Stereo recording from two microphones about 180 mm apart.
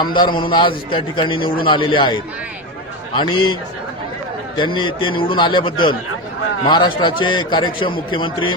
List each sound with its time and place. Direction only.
0.0 s a man's voice: 25° left (ahead or behind)
3.2 s a man's voice: 25° left (ahead or behind)